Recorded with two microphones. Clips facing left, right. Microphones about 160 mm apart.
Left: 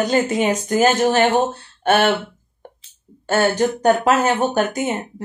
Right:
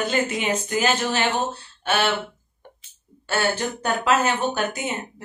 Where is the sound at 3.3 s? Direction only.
45° left (ahead or behind).